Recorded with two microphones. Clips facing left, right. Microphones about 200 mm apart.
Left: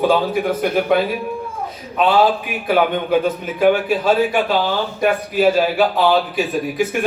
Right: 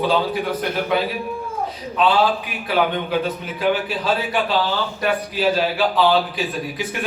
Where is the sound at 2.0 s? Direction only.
50° left (ahead or behind).